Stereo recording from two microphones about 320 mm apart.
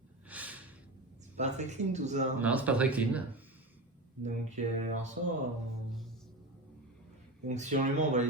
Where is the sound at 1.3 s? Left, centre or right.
Right.